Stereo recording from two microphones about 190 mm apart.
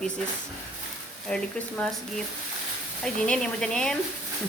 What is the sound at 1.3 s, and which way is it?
Speech, 5° left (ahead or behind).